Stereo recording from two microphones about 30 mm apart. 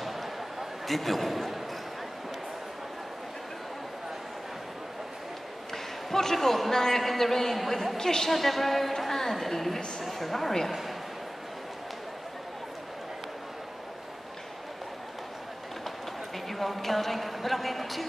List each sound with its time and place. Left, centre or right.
0.0 s a sound: centre
5.7 s a man's voice: centre
8.0 s a woman's voice: centre
8.3 s a woman's voice: centre
16.4 s a woman's voice: centre